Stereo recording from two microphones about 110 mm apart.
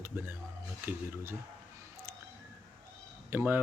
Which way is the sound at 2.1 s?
20° right (ahead or behind).